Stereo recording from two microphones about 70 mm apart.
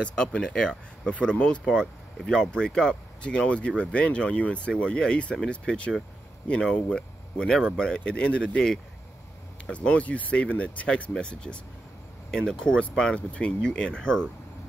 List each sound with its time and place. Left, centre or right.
0.1 s speech: centre